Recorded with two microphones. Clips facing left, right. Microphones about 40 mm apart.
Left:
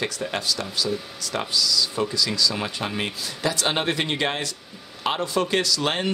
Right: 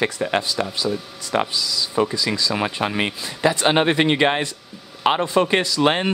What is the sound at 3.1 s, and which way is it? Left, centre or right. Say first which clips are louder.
Speech: right 6 dB; right.